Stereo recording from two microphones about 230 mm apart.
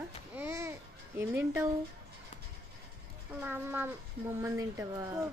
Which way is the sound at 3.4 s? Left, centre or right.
Centre.